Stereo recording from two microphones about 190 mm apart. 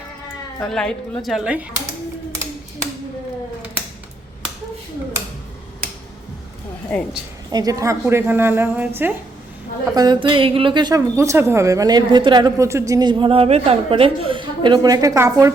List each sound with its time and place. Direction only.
0.6 s a woman's voice: 5° left (ahead or behind)
6.9 s a woman's voice: 10° left (ahead or behind)
7.5 s a woman's voice: 20° right (ahead or behind)
9.9 s a woman's voice: 20° right (ahead or behind)